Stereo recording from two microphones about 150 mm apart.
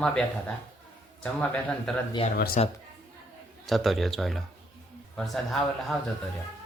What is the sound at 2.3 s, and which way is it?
Speech, 90° left.